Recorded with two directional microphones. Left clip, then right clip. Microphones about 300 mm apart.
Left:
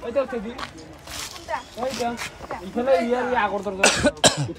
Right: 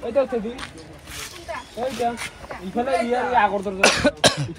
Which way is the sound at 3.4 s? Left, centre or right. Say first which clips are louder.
Right 2 dB; centre.